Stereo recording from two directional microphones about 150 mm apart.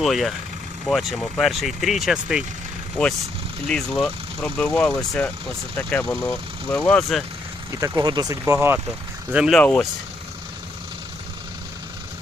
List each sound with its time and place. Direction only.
0.0 s speech: centre (ahead or behind)
3.7 s speech: 5° left (ahead or behind)
7.7 s speech: 20° right (ahead or behind); by 9.6 s 5° right (ahead or behind)
9.6 s speech: 10° left (ahead or behind)